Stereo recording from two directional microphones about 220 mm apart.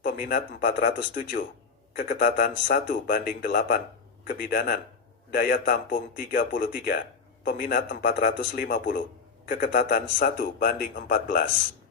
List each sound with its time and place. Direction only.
0.0 s a man's voice: 40° left (ahead or behind)